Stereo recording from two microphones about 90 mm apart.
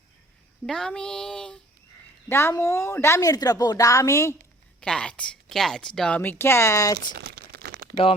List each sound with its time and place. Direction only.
0.6 s a woman's voice: 5° left (ahead or behind)
2.3 s a woman's voice: 30° left (ahead or behind)
4.8 s a woman's voice: 10° left (ahead or behind); by 7.0 s 40° left (ahead or behind)